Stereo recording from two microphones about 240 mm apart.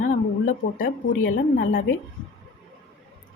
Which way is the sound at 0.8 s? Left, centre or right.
Left.